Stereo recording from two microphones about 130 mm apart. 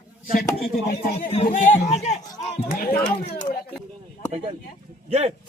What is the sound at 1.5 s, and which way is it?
Speech, 90° left.